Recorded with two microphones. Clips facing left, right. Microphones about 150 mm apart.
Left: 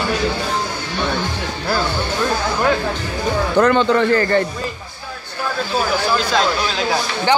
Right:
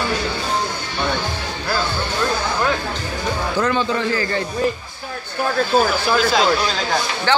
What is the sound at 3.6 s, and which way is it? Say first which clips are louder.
Speech: left 6 dB; 65° left (ahead or behind).